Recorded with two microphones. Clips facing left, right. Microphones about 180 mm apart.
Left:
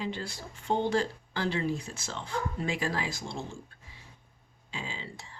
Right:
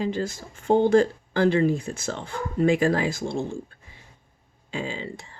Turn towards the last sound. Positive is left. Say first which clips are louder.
# right 9 dB
turn(degrees=-55)  # may be behind; listen again after turning